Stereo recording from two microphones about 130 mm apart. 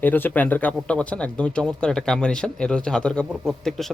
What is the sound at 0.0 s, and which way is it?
A man's voice, 15° left (ahead or behind).